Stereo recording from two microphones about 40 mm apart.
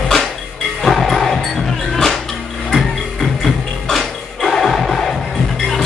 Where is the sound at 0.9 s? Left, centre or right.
Centre.